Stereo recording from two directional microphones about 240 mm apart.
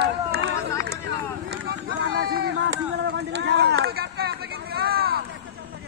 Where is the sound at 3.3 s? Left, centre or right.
Right.